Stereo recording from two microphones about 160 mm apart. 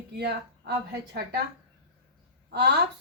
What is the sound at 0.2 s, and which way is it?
A woman's voice, 90° right.